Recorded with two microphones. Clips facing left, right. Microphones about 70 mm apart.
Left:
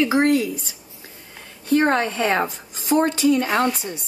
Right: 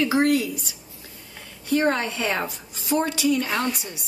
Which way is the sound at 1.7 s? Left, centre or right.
Left.